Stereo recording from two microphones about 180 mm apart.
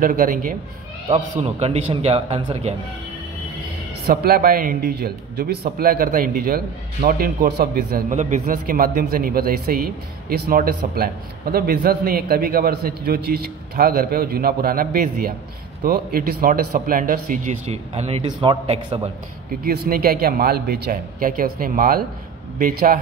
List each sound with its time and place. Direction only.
0.0 s speech: 50° right (ahead or behind)
1.1 s a man's voice: 35° right (ahead or behind)
4.1 s a man's voice: 55° right (ahead or behind)
11.0 s a man's voice: 55° right (ahead or behind); by 18.9 s 25° right (ahead or behind)
19.6 s a man's voice: 55° right (ahead or behind)